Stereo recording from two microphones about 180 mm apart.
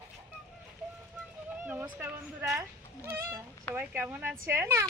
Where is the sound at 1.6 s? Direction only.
10° right (ahead or behind).